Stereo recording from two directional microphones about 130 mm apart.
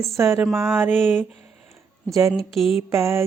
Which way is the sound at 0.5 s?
15° right (ahead or behind).